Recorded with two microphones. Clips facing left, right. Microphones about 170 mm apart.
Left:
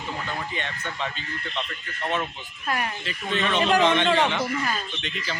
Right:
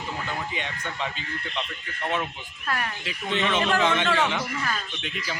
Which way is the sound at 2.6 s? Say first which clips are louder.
Left 2 dB; 15° left (ahead or behind).